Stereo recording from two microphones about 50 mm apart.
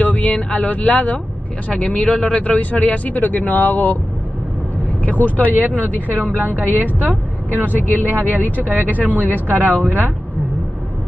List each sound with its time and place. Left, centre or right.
0.0 s speech: left
5.0 s speech: left
5.6 s a woman's voice: right
7.8 s speech: left
8.5 s a woman's voice: right